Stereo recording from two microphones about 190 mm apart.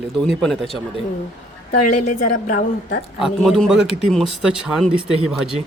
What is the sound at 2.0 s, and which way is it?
Speech, 40° left (ahead or behind).